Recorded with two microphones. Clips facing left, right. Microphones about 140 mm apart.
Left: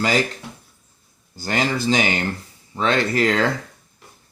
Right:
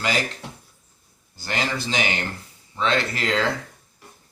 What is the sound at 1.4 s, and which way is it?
Speech, 40° left (ahead or behind).